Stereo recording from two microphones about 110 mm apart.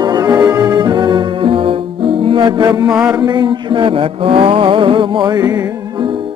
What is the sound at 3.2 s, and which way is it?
Mantra, 40° right (ahead or behind).